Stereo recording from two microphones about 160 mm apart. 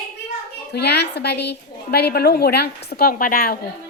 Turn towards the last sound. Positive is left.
turn(degrees=65)  # may be behind; listen again after turning